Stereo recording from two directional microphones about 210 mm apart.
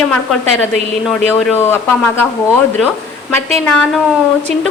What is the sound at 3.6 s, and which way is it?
Speech, 5° left (ahead or behind).